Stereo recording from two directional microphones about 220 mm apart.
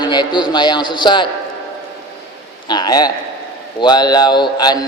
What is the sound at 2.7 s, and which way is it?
A man's voice, 20° left (ahead or behind).